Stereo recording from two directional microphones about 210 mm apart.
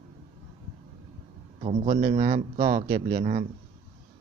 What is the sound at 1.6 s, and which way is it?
Speech, 30° right (ahead or behind).